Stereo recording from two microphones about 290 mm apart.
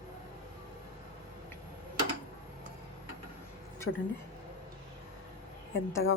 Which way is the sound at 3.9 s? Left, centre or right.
Left.